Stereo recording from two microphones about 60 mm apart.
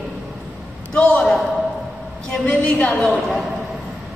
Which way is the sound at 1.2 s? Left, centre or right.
Centre.